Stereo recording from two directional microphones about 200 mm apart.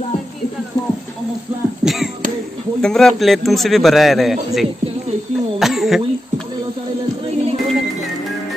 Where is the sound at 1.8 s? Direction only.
Centre (ahead or behind).